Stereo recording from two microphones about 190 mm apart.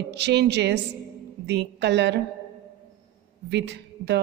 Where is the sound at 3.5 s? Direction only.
65° right (ahead or behind).